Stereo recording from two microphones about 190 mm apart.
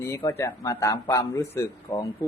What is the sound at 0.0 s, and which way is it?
Speech, 15° left (ahead or behind).